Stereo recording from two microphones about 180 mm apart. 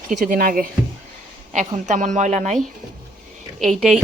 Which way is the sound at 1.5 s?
40° right (ahead or behind).